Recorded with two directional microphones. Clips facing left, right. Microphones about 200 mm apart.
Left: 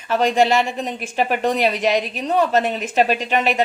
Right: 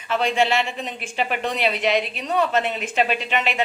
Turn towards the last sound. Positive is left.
turn(degrees=40)  # may be behind; listen again after turning